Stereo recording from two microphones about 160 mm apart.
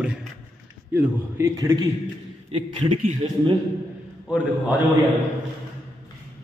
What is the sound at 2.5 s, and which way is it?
A man's voice, 35° right (ahead or behind).